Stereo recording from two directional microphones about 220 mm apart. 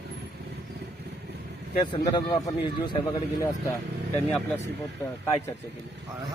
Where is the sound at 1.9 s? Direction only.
20° left (ahead or behind).